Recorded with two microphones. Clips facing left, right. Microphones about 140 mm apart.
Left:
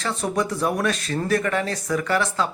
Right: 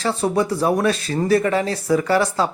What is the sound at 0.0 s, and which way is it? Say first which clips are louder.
Speech: right 5 dB; 30° right (ahead or behind).